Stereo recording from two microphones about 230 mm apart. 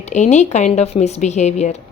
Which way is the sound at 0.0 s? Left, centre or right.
Left.